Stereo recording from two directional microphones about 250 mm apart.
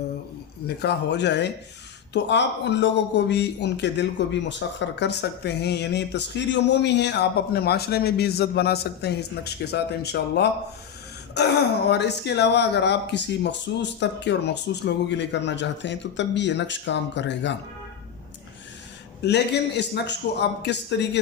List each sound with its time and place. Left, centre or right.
0.8 s speech: left
19.2 s speech: left